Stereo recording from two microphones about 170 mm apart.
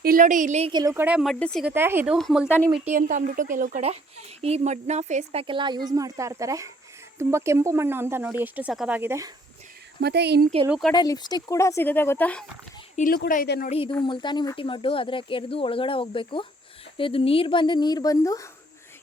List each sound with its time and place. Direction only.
0.0 s speech: 55° right (ahead or behind)
0.7 s a woman's voice: 25° right (ahead or behind)
0.9 s speech: 10° right (ahead or behind)
1.7 s speech: 15° right (ahead or behind)
2.1 s speech: centre (ahead or behind)
2.9 s speech: 50° right (ahead or behind)
3.8 s speech: 40° right (ahead or behind); by 9.0 s 5° right (ahead or behind)
9.0 s speech: 15° right (ahead or behind)
10.0 s speech: 75° right (ahead or behind)
10.7 s speech: centre (ahead or behind)
10.9 s speech: 25° left (ahead or behind); by 12.5 s 10° left (ahead or behind)
13.0 s speech: 55° left (ahead or behind)
13.7 s speech: 35° left (ahead or behind)